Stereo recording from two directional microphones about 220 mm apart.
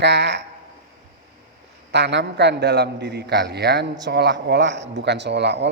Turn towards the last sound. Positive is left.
turn(degrees=-50)  # may be behind; listen again after turning